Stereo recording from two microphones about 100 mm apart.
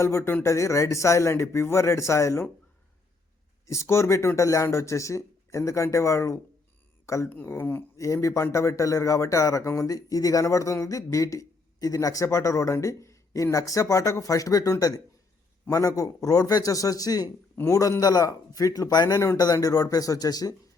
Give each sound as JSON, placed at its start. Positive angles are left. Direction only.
{"t": 0.0, "sound": "speech", "side_deg": 30}
{"t": 3.7, "sound": "speech", "side_deg": 30}
{"t": 7.0, "sound": "a sound", "side_deg": 30}
{"t": 7.3, "sound": "speech", "side_deg": 20}
{"t": 7.9, "sound": "speech", "side_deg": 30}